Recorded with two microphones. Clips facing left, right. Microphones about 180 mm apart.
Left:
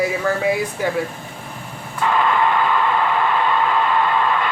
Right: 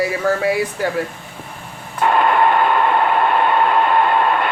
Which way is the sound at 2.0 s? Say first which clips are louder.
Right 3 dB; 55° right (ahead or behind).